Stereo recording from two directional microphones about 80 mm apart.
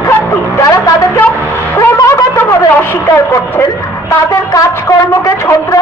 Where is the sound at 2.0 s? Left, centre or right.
Left.